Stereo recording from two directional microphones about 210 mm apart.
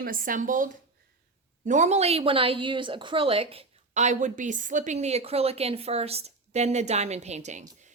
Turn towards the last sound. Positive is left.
turn(degrees=-35)  # may be behind; listen again after turning